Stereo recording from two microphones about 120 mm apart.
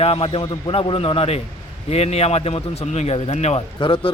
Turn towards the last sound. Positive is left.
turn(degrees=40)  # may be behind; listen again after turning